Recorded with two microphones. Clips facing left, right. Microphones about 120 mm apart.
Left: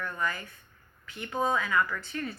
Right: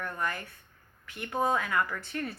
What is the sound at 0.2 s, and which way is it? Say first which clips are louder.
A woman's voice: left 1 dB; 55° right (ahead or behind).